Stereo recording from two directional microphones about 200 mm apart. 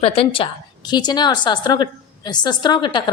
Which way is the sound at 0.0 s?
25° left (ahead or behind).